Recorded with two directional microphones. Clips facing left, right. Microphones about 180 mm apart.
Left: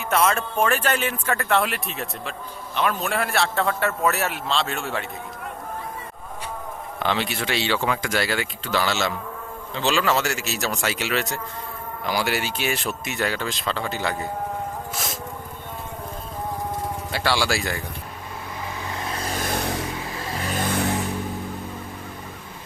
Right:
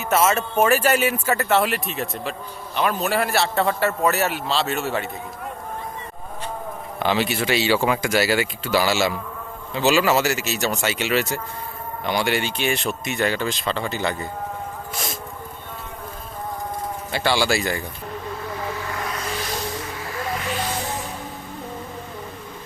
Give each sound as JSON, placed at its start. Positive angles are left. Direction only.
{"t": 0.0, "sound": "speech", "side_deg": -5}
{"t": 7.0, "sound": "speech", "side_deg": -5}
{"t": 17.1, "sound": "speech", "side_deg": 0}
{"t": 18.8, "sound": "vehicle", "side_deg": 25}
{"t": 19.4, "sound": "vehicle", "side_deg": 55}
{"t": 20.1, "sound": "a sound", "side_deg": 35}